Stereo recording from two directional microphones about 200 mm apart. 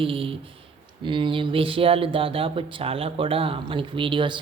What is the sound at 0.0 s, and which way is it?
A woman's voice, 25° right (ahead or behind).